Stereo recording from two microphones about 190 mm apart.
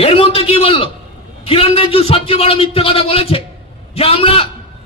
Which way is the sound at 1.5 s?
30° left (ahead or behind).